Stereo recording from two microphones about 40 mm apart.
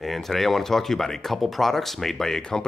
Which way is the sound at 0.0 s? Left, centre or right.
Centre.